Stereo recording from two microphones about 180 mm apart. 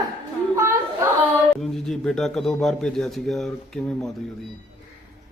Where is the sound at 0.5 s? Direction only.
15° right (ahead or behind).